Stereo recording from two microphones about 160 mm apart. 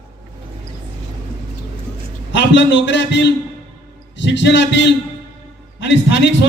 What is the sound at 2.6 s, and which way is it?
A man's voice, 90° left.